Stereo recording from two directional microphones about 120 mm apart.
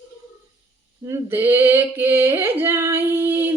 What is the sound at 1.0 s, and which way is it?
Singing, 20° right (ahead or behind).